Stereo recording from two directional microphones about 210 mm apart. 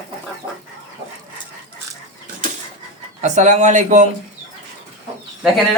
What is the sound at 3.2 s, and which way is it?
Speech, 35° right (ahead or behind).